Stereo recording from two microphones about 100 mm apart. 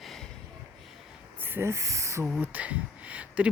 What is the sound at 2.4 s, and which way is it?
Speech, 15° right (ahead or behind).